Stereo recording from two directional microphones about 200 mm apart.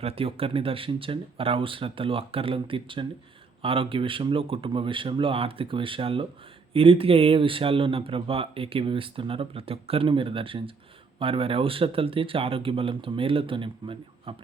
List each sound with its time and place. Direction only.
0.0 s speech: 30° right (ahead or behind)